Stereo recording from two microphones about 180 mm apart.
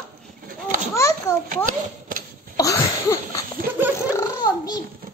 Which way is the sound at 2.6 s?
20° left (ahead or behind).